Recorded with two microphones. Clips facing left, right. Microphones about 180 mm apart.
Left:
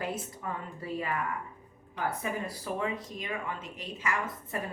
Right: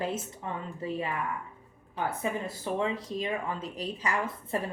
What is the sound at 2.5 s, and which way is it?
A woman's voice, 25° right (ahead or behind).